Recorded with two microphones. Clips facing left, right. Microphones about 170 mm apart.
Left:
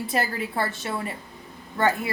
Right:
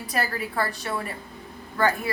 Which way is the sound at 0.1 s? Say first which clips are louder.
Right 1 dB; 25° left (ahead or behind).